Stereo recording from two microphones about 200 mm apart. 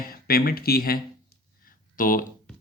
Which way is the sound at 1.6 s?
45° left (ahead or behind).